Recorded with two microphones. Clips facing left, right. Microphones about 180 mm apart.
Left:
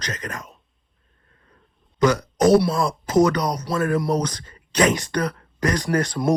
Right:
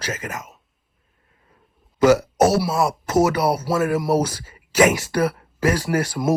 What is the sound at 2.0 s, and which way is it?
Speech, 5° right (ahead or behind).